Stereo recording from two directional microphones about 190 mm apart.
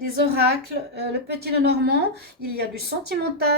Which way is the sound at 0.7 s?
55° right (ahead or behind).